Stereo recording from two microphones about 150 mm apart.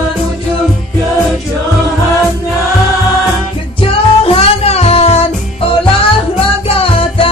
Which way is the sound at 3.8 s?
40° left (ahead or behind).